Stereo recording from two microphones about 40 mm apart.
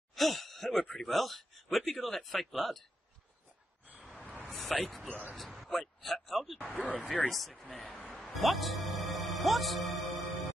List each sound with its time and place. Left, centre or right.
0.1 s groan: centre
1.0 s a man's voice: centre
4.5 s a sound: centre
5.3 s speech: centre
6.7 s speech: left
7.2 s a man's voice: centre
8.2 s music: centre